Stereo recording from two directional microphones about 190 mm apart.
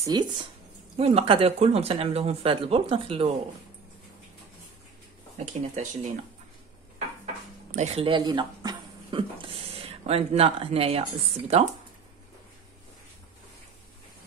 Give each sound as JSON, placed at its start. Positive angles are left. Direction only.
{"t": 0.0, "sound": "speech", "side_deg": -20}
{"t": 5.4, "sound": "speech", "side_deg": -40}
{"t": 7.7, "sound": "speech", "side_deg": -35}